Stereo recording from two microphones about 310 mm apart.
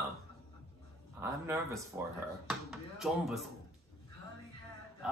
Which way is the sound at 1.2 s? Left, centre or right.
Centre.